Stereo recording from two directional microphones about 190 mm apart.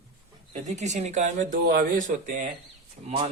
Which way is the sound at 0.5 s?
40° right (ahead or behind).